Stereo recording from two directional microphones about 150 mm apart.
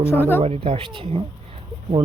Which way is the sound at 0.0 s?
15° left (ahead or behind).